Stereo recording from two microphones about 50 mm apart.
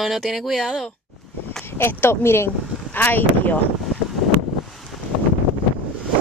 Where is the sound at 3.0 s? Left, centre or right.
Left.